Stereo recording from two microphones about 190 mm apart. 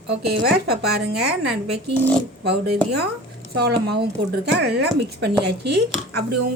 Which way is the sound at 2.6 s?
60° right (ahead or behind).